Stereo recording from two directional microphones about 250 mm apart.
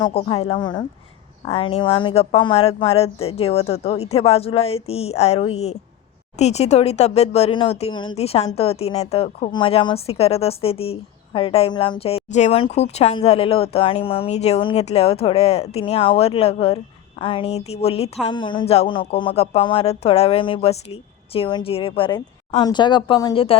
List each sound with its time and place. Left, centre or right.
0.0 s a woman's voice: left